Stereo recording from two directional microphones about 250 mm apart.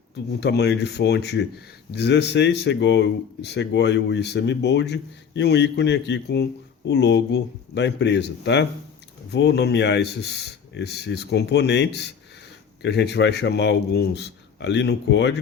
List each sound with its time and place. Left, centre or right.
0.3 s speech: left